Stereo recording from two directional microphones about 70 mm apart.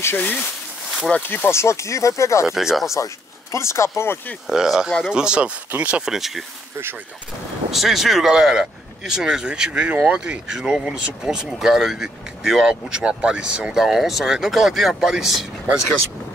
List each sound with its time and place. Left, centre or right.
0.0 s speech: left
2.4 s speech: centre
3.5 s speech: left
4.5 s speech: centre
6.0 s speech: centre
7.7 s speech: centre